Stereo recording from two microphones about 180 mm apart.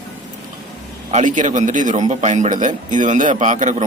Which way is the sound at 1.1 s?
40° right (ahead or behind).